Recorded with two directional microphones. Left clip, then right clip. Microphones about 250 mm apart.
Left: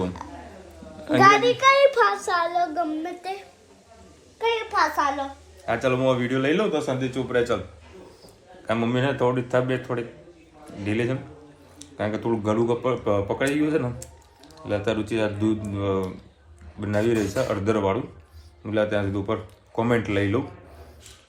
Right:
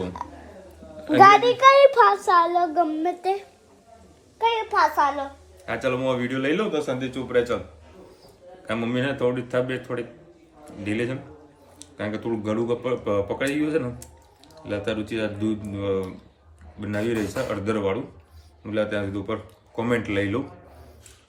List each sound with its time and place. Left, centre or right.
1.2 s a child's voice: right
4.4 s a child's voice: right
5.6 s speech: centre
8.6 s speech: centre